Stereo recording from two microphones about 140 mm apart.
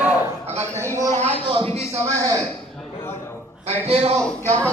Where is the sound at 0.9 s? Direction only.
55° right (ahead or behind).